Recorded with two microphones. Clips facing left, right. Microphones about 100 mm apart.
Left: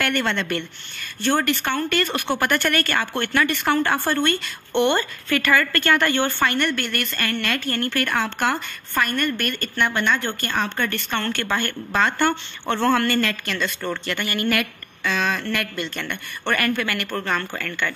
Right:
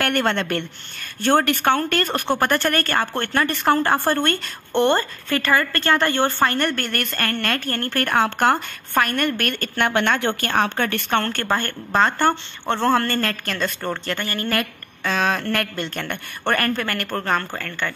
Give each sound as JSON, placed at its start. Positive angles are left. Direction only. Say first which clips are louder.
{"t": 0.0, "sound": "a woman's voice", "louder": "right 2 dB", "side_deg": -45}